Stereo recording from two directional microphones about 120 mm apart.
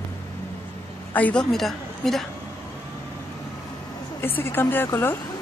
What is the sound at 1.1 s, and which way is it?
A woman's voice, 10° left (ahead or behind).